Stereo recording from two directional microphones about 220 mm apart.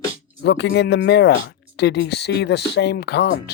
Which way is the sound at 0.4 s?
50° left (ahead or behind).